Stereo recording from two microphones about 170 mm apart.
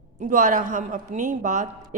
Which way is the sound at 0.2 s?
50° right (ahead or behind).